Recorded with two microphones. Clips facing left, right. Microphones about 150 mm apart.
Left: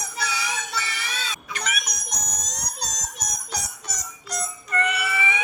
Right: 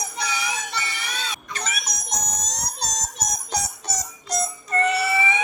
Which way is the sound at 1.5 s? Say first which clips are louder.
Left 2 dB; 40° right (ahead or behind).